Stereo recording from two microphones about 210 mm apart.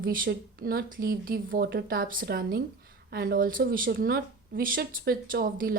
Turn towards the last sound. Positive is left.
turn(degrees=-45)  # may be behind; listen again after turning